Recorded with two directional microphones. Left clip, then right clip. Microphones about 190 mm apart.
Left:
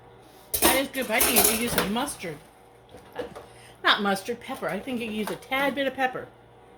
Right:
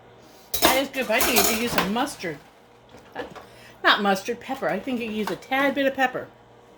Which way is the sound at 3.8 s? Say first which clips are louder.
Right 3 dB; 35° right (ahead or behind).